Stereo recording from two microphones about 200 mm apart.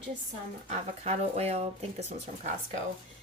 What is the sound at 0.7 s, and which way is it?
Speech, 30° right (ahead or behind).